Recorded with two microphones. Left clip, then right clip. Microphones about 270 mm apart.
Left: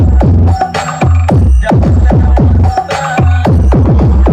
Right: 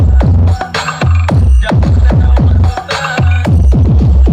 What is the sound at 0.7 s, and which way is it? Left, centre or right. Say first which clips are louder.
Music: left 1 dB; centre.